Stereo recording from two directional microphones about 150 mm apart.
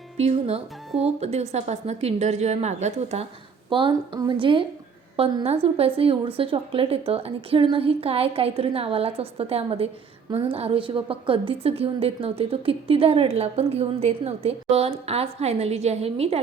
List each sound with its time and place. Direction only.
0.2 s a woman's voice: 45° right (ahead or behind)
3.7 s a woman's voice: 35° right (ahead or behind)